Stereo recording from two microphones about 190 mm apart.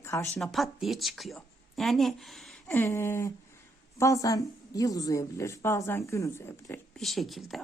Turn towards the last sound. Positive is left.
turn(degrees=0)  # may be behind; listen again after turning